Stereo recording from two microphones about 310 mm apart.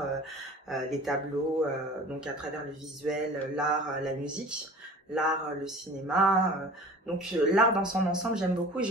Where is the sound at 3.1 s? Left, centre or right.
Centre.